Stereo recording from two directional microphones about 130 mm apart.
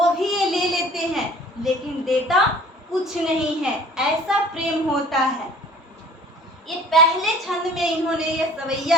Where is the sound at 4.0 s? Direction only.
5° right (ahead or behind).